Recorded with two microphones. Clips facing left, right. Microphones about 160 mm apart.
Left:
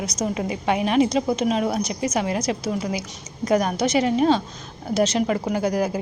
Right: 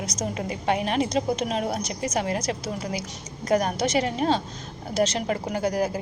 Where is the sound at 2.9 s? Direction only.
30° right (ahead or behind).